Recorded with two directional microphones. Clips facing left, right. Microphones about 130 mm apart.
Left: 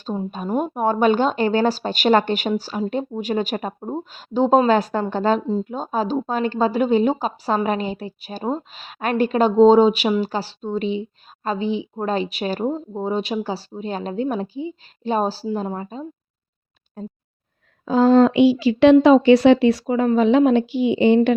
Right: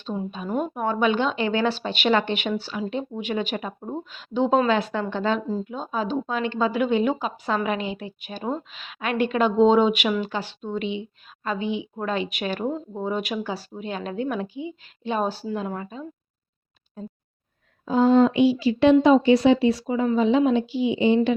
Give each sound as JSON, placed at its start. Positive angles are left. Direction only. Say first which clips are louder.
{"t": 0.0, "sound": "speech", "louder": "left 3 dB", "side_deg": 35}
{"t": 17.8, "sound": "speech", "louder": "left 3 dB", "side_deg": 90}